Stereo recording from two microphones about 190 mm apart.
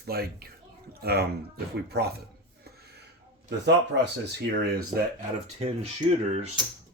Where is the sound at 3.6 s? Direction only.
65° right (ahead or behind).